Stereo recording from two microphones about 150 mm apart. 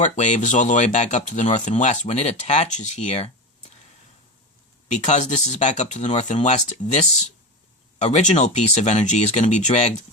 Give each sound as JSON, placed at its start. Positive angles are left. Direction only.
{"t": 0.0, "sound": "speech", "side_deg": 50}
{"t": 4.9, "sound": "speech", "side_deg": 50}
{"t": 8.0, "sound": "speech", "side_deg": 50}